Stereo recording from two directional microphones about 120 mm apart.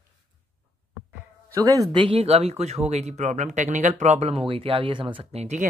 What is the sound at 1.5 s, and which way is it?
Speech, 30° right (ahead or behind).